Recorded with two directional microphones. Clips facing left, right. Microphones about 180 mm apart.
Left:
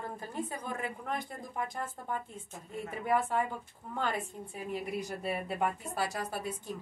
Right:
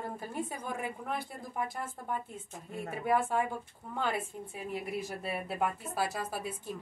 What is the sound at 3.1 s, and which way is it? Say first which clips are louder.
Speech: right 1 dB; 10° right (ahead or behind).